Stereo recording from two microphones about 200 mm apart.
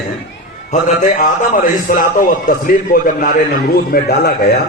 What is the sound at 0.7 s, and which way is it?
A man's voice, 40° left (ahead or behind).